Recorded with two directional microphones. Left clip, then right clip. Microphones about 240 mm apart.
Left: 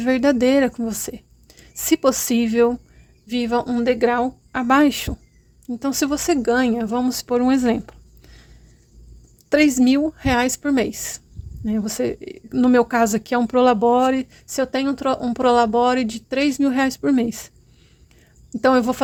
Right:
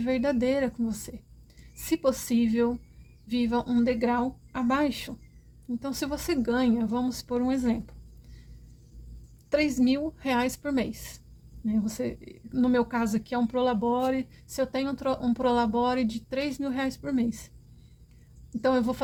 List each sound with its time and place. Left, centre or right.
0.0 s speech: left
9.5 s speech: left
18.6 s speech: left